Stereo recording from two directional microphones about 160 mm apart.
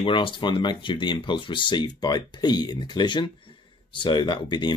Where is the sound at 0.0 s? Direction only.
30° left (ahead or behind).